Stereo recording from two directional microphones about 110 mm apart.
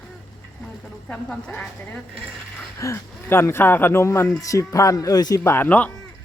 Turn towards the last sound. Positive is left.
turn(degrees=15)  # may be behind; listen again after turning